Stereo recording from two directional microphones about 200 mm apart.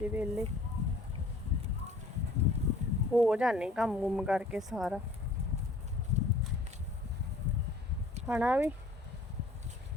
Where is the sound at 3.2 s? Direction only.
5° right (ahead or behind).